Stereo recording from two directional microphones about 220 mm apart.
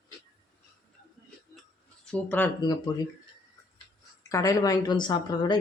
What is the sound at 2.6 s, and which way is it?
Speech, 20° left (ahead or behind).